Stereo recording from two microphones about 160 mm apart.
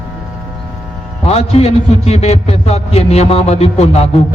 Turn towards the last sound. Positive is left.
turn(degrees=40)  # may be behind; listen again after turning